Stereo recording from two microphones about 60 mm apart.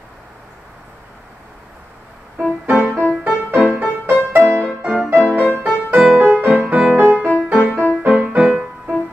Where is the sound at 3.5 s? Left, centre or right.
Centre.